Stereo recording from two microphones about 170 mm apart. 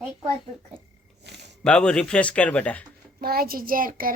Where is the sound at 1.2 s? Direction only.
80° right.